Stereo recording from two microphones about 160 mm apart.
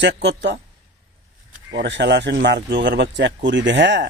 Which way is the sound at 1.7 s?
90° right.